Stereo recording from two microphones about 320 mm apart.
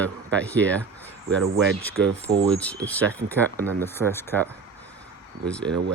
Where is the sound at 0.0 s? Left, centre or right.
Centre.